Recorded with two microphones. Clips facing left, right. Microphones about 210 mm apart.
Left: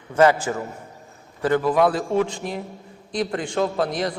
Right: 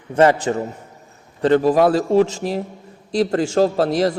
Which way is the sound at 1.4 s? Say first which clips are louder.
Right 6 dB; 30° right (ahead or behind).